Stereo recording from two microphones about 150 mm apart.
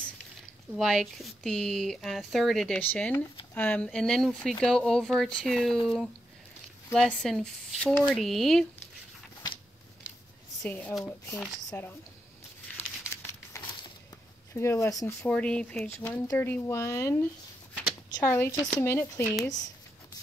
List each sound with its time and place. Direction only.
0.7 s speech: centre (ahead or behind)
10.6 s speech: 10° left (ahead or behind)
12.7 s crumpling: 15° left (ahead or behind)
14.5 s speech: 20° left (ahead or behind)
15.2 s speech: 10° left (ahead or behind)